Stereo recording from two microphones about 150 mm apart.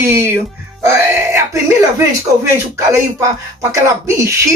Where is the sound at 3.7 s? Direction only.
20° right (ahead or behind).